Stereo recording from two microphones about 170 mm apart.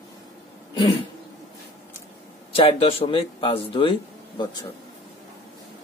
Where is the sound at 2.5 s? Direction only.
35° left (ahead or behind).